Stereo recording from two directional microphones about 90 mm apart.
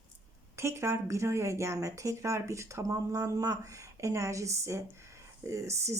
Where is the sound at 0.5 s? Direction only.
30° right (ahead or behind).